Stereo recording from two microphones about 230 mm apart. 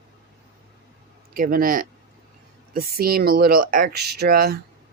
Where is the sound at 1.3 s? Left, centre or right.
Right.